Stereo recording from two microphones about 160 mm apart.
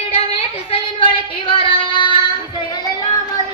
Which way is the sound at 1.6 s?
30° left (ahead or behind).